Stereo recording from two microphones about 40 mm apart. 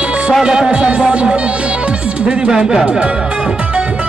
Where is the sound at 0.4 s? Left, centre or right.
Centre.